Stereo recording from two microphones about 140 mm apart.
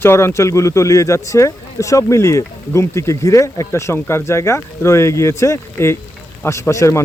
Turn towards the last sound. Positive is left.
turn(degrees=20)  # may be behind; listen again after turning